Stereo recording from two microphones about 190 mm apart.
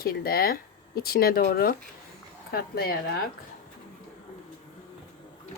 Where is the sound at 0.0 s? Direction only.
50° left (ahead or behind).